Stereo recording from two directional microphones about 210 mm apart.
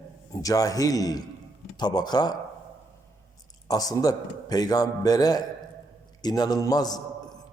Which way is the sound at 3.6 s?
15° left (ahead or behind).